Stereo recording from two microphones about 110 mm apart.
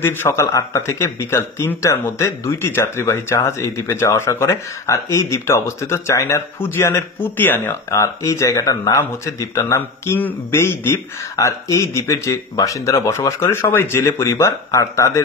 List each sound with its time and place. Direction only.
0.0 s a man's voice: 20° left (ahead or behind)